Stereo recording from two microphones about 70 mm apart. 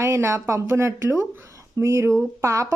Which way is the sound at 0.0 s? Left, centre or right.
Right.